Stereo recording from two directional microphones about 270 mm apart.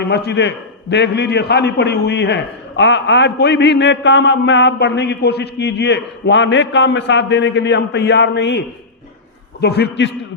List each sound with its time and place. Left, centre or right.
0.0 s a man's voice: left